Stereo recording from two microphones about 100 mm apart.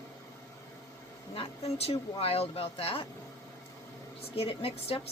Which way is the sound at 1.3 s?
80° left.